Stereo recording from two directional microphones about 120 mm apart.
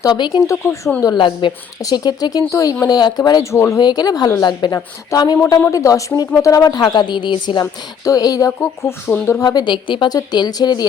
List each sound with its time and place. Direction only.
0.0 s speech: 35° left (ahead or behind)
1.0 s a woman's voice: 40° left (ahead or behind); by 9.0 s 20° left (ahead or behind)
9.4 s a woman's voice: 35° left (ahead or behind)